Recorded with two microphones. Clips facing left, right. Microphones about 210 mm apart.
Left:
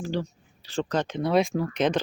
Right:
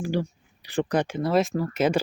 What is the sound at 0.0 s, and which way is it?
Speech, 10° right (ahead or behind).